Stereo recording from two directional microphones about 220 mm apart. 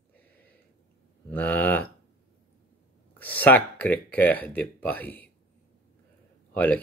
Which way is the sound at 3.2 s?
5° left (ahead or behind).